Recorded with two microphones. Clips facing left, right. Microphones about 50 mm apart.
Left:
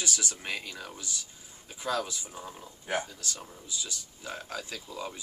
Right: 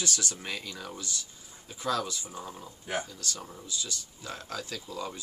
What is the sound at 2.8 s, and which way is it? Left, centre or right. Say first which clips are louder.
Speech: left 2 dB; left.